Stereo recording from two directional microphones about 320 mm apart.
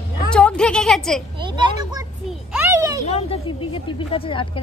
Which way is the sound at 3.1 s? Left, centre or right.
Centre.